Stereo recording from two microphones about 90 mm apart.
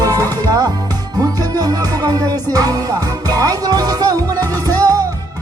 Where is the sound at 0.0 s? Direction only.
40° right (ahead or behind).